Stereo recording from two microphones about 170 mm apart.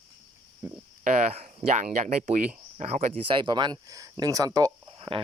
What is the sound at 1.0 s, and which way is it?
Speech, 40° right (ahead or behind).